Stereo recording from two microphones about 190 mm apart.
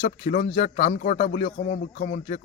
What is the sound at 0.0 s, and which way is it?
A man's voice, 45° left (ahead or behind).